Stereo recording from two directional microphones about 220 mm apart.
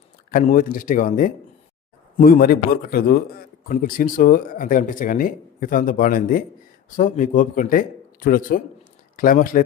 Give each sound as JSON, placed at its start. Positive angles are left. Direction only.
{"t": 0.3, "sound": "a man's voice", "side_deg": 35}